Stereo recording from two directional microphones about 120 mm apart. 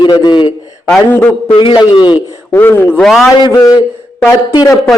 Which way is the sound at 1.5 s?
40° left (ahead or behind).